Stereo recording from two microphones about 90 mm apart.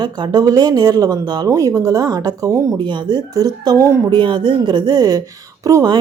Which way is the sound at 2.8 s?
60° right (ahead or behind).